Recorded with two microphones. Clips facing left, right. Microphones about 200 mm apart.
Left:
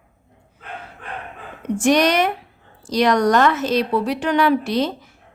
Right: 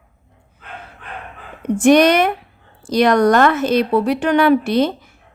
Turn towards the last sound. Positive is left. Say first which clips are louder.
# right 4 dB
turn(degrees=-55)  # may be behind; listen again after turning